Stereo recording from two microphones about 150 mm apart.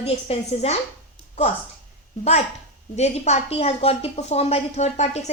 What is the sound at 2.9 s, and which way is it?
A woman's voice, 50° left (ahead or behind).